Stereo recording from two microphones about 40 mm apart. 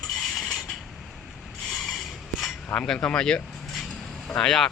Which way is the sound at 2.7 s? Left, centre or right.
Left.